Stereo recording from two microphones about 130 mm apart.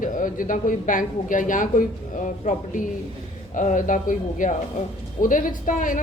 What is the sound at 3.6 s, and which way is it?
A woman's voice, 75° left (ahead or behind).